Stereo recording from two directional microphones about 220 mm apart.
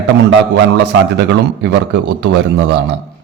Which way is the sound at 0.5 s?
50° right (ahead or behind).